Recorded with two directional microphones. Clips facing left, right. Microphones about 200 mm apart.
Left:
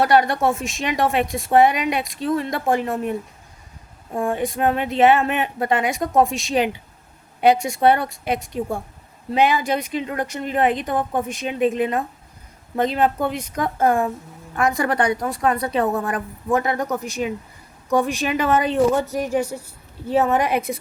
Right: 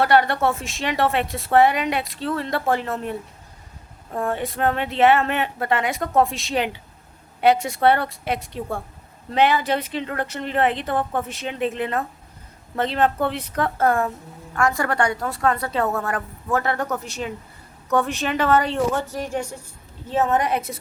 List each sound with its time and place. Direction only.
0.0 s a woman's voice: 15° left (ahead or behind)
9.3 s a woman's voice: 15° left (ahead or behind)